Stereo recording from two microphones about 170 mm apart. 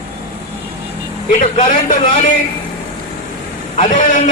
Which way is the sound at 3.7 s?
50° left (ahead or behind).